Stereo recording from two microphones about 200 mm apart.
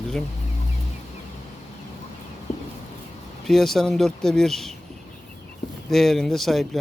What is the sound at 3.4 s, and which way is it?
Speech, centre (ahead or behind).